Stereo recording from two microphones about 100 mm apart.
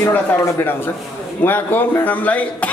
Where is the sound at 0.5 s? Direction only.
25° left (ahead or behind).